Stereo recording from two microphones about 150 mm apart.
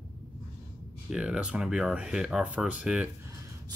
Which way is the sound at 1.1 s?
5° right (ahead or behind).